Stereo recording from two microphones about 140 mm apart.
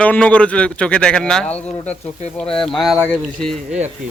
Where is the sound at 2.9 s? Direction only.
15° left (ahead or behind).